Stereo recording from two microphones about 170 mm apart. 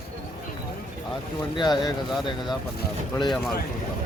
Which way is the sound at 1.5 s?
25° left (ahead or behind).